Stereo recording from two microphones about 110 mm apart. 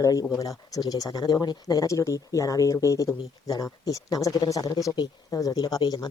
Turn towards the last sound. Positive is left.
turn(degrees=35)  # may be behind; listen again after turning